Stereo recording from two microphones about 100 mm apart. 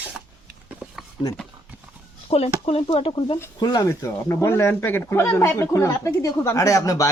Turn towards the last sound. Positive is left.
turn(degrees=35)  # may be behind; listen again after turning